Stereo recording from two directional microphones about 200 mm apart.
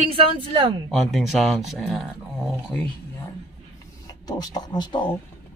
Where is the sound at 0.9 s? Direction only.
Centre (ahead or behind).